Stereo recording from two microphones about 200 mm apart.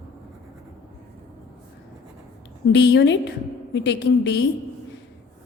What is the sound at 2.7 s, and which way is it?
A woman's voice, 60° left (ahead or behind).